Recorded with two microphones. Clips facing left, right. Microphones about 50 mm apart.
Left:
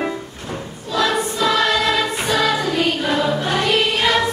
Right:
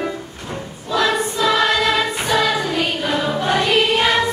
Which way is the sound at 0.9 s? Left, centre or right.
Right.